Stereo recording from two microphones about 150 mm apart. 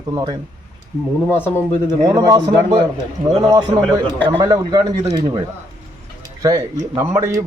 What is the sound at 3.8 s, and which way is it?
Speech, 10° left (ahead or behind).